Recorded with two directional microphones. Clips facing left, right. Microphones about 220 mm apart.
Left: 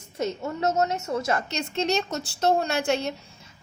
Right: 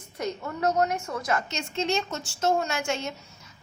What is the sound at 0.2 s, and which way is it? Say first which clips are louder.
A woman's voice: left 2 dB; 25° left (ahead or behind).